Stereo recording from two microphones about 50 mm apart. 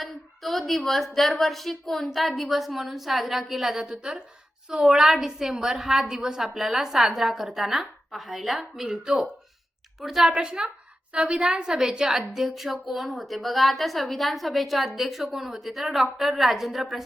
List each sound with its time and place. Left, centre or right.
0.0 s a woman's voice: centre